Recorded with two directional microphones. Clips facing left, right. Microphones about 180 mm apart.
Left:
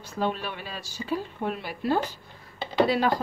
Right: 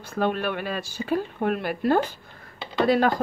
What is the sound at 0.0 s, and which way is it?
Speech, 55° right (ahead or behind).